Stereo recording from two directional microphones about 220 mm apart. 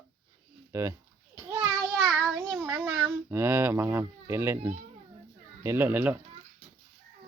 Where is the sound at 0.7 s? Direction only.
15° right (ahead or behind).